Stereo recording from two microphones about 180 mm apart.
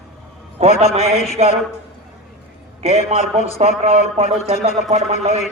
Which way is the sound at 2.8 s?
35° right (ahead or behind).